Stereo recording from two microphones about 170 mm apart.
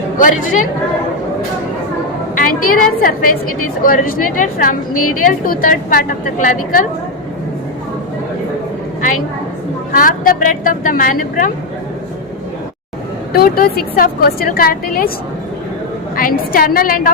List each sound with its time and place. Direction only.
0.2 s speech: 50° left (ahead or behind)
2.3 s a woman's voice: 50° left (ahead or behind)
9.9 s speech: 55° left (ahead or behind)
13.3 s a woman's voice: 60° left (ahead or behind)
16.1 s a woman's voice: 55° left (ahead or behind)